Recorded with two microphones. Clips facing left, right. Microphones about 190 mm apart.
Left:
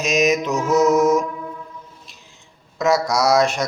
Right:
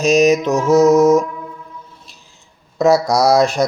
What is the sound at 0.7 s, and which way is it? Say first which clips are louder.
Music: right 5 dB; 30° right (ahead or behind).